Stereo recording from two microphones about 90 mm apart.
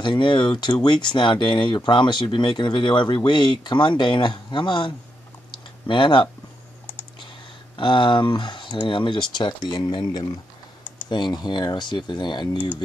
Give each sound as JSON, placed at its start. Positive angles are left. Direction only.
{"t": 0.0, "sound": "speech", "side_deg": 60}
{"t": 5.5, "sound": "clicking", "side_deg": 65}
{"t": 7.7, "sound": "speech", "side_deg": 65}
{"t": 9.4, "sound": "speech", "side_deg": 55}